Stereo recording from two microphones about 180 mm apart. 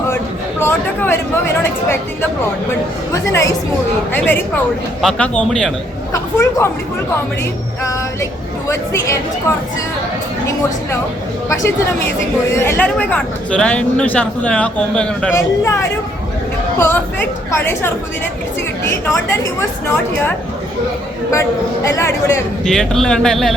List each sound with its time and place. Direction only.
0.6 s speech: 15° left (ahead or behind)
3.1 s speech: 15° left (ahead or behind)
8.7 s speech: 15° left (ahead or behind)
12.5 s speech: 15° left (ahead or behind)
21.8 s speech: 15° left (ahead or behind)
22.6 s speech: 5° left (ahead or behind)